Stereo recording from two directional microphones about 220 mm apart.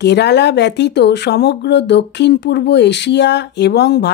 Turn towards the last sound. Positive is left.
turn(degrees=50)  # may be behind; listen again after turning